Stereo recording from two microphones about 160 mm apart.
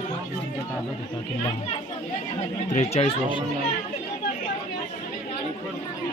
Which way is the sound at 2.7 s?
40° left (ahead or behind).